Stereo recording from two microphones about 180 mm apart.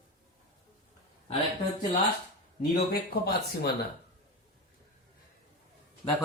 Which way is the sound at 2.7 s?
60° left (ahead or behind).